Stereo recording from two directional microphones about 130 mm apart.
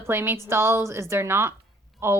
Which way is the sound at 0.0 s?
15° right (ahead or behind).